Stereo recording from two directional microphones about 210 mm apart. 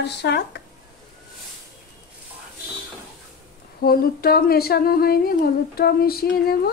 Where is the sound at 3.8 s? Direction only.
45° left (ahead or behind).